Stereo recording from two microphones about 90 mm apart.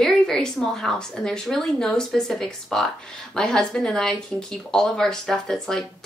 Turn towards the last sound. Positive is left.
turn(degrees=5)  # may be behind; listen again after turning